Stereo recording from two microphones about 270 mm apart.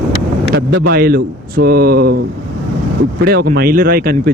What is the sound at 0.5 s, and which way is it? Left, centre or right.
Speech, right.